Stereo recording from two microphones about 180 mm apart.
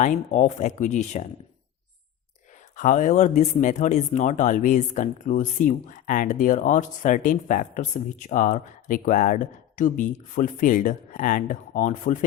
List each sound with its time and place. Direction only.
0.0 s speech: 45° left (ahead or behind)
2.7 s speech: 45° left (ahead or behind)